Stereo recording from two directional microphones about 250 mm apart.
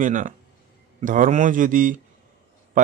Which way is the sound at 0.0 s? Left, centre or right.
Right.